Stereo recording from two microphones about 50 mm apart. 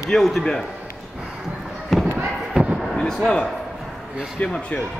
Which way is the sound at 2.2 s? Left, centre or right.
Centre.